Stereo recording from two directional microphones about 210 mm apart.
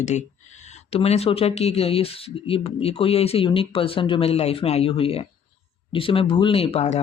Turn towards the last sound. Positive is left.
turn(degrees=30)  # may be behind; listen again after turning